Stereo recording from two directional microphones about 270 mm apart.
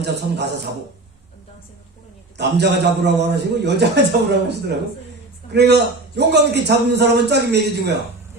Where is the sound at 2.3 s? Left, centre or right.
Right.